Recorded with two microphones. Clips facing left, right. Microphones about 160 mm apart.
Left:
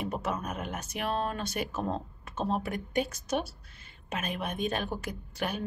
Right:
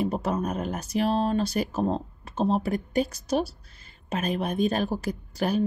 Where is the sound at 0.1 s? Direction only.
35° right (ahead or behind).